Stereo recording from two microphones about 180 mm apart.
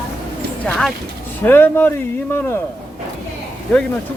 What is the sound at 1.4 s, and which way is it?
Speech, 10° left (ahead or behind).